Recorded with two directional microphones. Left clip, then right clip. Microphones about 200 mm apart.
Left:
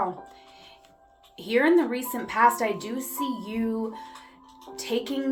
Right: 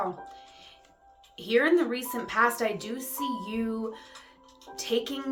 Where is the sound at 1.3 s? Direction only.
15° right (ahead or behind).